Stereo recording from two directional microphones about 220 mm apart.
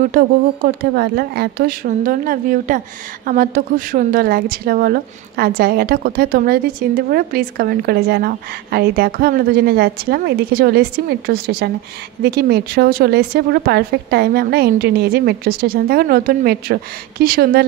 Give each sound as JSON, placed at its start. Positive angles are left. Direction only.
{"t": 0.1, "sound": "a woman's voice", "side_deg": -40}